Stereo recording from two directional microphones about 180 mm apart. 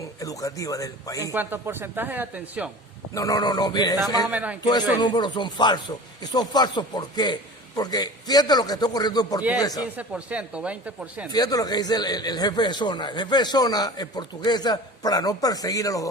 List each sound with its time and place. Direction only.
0.0 s speech: 20° left (ahead or behind)
1.3 s speech: 10° right (ahead or behind)
3.2 s speech: 20° left (ahead or behind)
4.3 s speech: 10° right (ahead or behind)
4.6 s speech: 25° left (ahead or behind)
10.0 s speech: 5° right (ahead or behind)
11.3 s speech: 20° left (ahead or behind)